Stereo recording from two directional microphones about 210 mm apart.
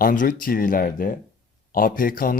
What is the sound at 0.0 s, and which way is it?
Speech, 40° left (ahead or behind).